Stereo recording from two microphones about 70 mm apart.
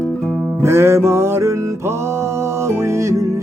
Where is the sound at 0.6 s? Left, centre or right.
Right.